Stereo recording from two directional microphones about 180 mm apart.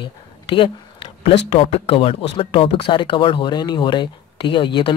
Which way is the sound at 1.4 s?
35° left (ahead or behind).